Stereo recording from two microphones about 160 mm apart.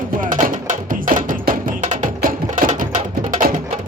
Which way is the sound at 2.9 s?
40° right (ahead or behind).